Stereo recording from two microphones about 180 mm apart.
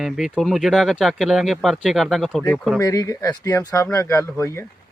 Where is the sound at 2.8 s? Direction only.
20° left (ahead or behind).